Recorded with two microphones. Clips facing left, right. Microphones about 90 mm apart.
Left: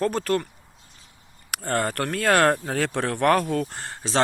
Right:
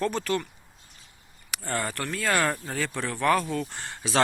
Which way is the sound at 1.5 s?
50° left (ahead or behind).